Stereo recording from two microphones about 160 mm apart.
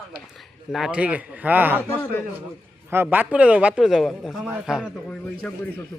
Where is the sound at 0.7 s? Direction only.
5° right (ahead or behind).